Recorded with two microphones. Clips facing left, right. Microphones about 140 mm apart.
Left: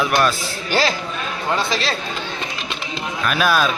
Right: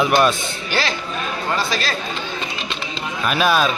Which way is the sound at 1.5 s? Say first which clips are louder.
Left 2 dB; 25° left (ahead or behind).